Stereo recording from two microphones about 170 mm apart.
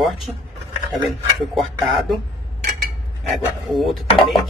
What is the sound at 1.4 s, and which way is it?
Speech, centre (ahead or behind).